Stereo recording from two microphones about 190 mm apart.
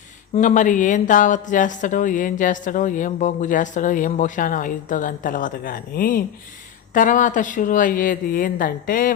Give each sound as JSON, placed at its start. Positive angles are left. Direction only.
{"t": 0.3, "sound": "speech", "side_deg": 40}